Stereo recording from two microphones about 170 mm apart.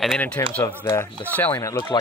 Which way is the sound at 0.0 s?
5° left (ahead or behind).